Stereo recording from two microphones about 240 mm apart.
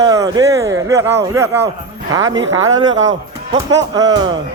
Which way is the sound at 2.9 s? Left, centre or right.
Right.